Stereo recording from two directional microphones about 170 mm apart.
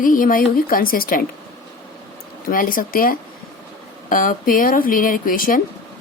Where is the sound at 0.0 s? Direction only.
55° left (ahead or behind).